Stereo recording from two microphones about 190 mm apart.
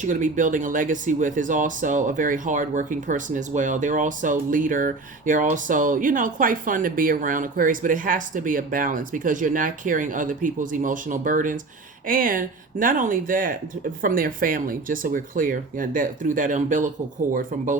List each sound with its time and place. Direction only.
0.0 s speech: 40° right (ahead or behind)